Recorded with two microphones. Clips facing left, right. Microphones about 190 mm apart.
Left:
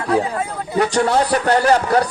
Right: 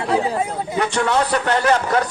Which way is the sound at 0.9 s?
35° left (ahead or behind).